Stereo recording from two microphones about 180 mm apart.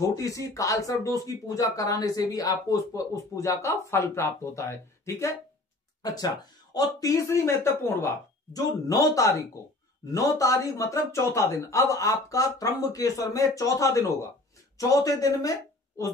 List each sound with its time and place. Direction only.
0.0 s speech: 20° left (ahead or behind)